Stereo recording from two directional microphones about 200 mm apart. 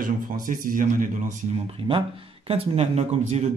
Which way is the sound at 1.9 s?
30° right (ahead or behind).